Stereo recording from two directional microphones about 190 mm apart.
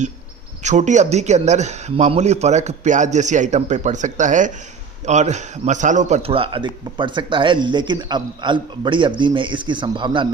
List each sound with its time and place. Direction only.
0.6 s a man's voice: 40° right (ahead or behind)